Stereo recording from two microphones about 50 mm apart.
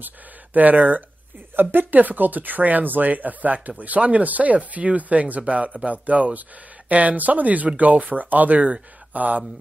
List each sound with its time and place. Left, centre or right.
0.0 s speech: right
1.6 s speech: right